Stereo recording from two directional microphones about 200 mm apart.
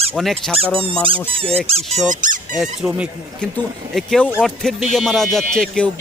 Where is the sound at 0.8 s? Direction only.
25° right (ahead or behind).